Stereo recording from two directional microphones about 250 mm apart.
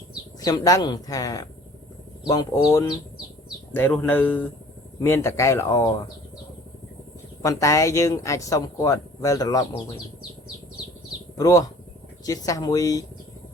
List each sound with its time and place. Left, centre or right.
0.4 s speech: centre
7.4 s speech: centre
11.3 s speech: centre